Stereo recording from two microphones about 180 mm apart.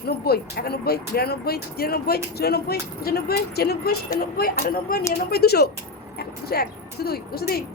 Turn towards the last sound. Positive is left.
turn(degrees=60)  # may be behind; listen again after turning